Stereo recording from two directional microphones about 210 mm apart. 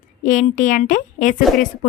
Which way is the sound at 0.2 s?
35° left (ahead or behind).